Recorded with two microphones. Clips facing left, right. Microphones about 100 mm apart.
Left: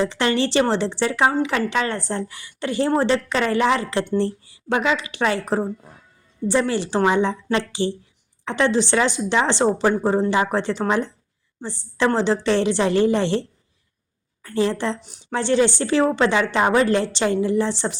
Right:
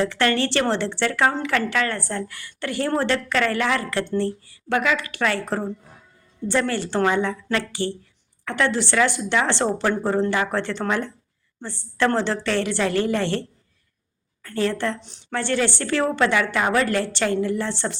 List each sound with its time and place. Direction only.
0.0 s a woman's voice: 20° left (ahead or behind)
14.4 s a woman's voice: 20° left (ahead or behind)